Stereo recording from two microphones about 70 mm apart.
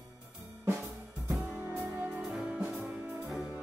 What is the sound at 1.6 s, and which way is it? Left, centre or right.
Music, right.